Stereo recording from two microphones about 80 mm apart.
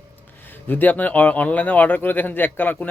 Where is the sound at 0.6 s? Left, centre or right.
Left.